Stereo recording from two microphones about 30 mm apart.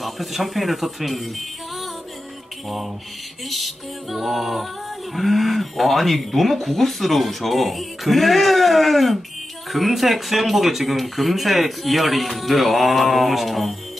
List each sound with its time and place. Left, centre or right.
0.0 s speech: centre
3.4 s speech: centre